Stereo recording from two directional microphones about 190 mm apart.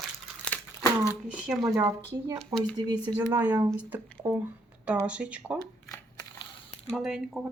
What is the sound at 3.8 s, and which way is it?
Speech, 10° right (ahead or behind).